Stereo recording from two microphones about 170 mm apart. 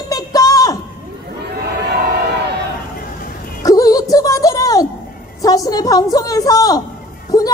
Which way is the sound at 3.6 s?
20° left (ahead or behind).